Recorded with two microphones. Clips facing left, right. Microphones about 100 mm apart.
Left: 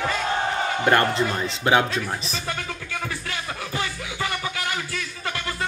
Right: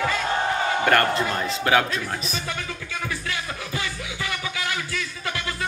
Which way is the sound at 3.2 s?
30° left (ahead or behind).